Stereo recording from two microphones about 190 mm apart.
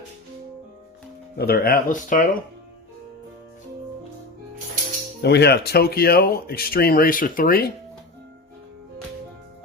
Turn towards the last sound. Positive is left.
turn(degrees=50)  # may be behind; listen again after turning